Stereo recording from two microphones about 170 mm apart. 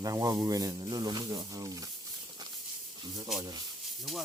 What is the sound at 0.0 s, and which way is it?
Speech, 20° right (ahead or behind).